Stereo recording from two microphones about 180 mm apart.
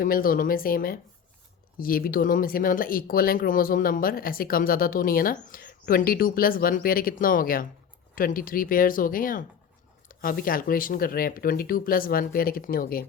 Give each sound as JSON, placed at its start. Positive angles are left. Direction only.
{"t": 0.0, "sound": "speech", "side_deg": 50}